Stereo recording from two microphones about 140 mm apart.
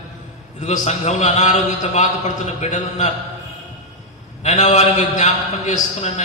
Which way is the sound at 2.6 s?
55° left (ahead or behind).